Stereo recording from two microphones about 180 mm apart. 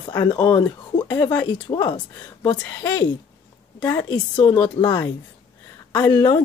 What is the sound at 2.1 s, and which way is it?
Speech, 10° left (ahead or behind).